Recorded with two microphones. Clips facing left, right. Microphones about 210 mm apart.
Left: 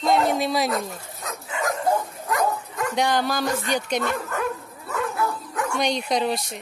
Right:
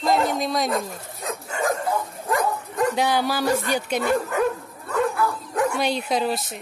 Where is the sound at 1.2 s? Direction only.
30° right (ahead or behind).